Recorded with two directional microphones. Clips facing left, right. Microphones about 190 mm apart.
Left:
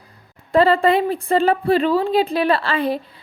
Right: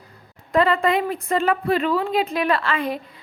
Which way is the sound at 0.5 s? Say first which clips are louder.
Left 4 dB; 30° left (ahead or behind).